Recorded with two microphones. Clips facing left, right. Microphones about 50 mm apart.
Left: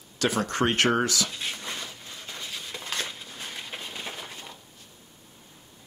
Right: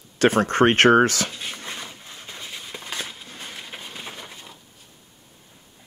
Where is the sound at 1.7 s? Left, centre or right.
Centre.